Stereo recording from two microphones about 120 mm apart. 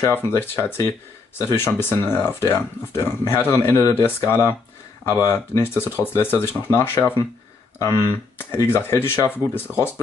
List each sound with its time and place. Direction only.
0.0 s speech: 20° left (ahead or behind)